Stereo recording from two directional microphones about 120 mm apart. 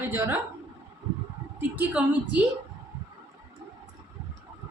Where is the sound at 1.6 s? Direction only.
15° right (ahead or behind).